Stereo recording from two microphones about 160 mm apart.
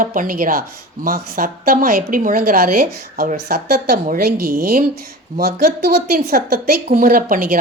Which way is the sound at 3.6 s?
75° right (ahead or behind).